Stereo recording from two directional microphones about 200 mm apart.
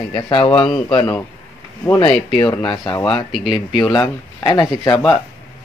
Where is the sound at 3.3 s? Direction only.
Centre (ahead or behind).